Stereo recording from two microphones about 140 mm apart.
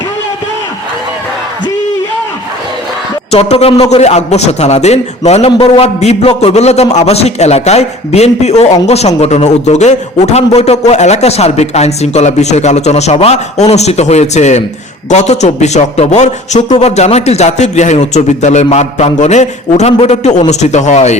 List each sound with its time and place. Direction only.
3.3 s a man's voice: 45° left (ahead or behind)
5.5 s a man's voice: 35° left (ahead or behind)
5.8 s a man's voice: 50° left (ahead or behind)